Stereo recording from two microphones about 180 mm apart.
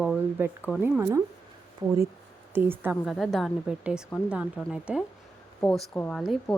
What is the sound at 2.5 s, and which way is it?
Speech, 10° right (ahead or behind).